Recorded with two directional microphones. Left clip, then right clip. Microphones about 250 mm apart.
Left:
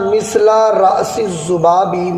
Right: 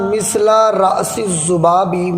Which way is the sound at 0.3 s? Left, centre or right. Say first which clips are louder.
Left 1 dB; right.